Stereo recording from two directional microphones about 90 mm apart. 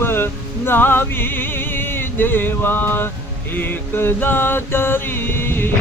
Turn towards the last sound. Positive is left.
turn(degrees=25)  # may be behind; listen again after turning